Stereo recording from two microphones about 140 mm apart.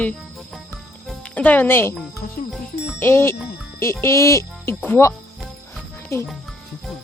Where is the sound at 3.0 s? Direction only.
15° left (ahead or behind).